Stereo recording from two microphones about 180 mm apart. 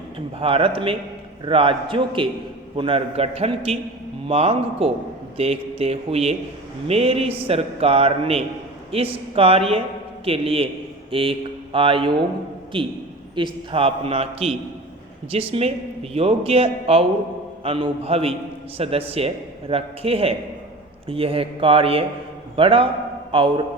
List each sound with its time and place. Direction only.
0.3 s a man's voice: 30° right (ahead or behind)